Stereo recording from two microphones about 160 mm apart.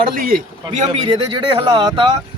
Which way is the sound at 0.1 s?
65° right (ahead or behind).